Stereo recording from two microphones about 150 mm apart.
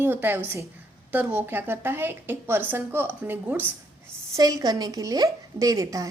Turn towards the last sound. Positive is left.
turn(degrees=-25)  # may be behind; listen again after turning